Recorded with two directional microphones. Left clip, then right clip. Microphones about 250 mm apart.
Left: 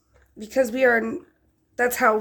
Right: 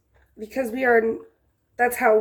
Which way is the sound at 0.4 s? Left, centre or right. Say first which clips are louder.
Left 3 dB; left.